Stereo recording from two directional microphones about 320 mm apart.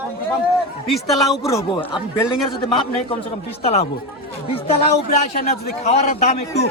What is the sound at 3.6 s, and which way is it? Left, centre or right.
A man's voice, centre.